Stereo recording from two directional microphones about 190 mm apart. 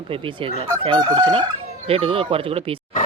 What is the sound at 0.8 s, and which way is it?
Speech, 25° right (ahead or behind).